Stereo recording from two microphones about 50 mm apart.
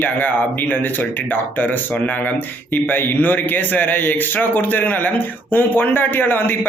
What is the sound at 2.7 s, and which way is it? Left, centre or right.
A man's voice, left.